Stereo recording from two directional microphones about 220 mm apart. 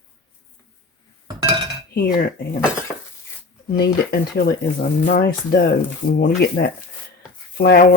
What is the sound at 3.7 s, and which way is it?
Speech, 45° left (ahead or behind).